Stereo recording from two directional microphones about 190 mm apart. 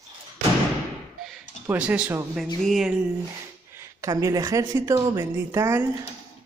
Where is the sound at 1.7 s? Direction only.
5° right (ahead or behind).